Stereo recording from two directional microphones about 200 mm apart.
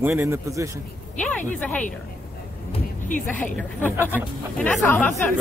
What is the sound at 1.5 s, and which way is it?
Speech, 5° left (ahead or behind).